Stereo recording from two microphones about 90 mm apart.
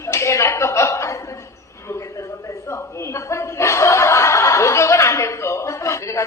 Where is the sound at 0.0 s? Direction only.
30° left (ahead or behind).